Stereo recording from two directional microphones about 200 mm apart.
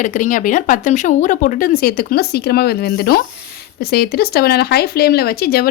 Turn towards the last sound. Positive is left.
turn(degrees=50)  # may be behind; listen again after turning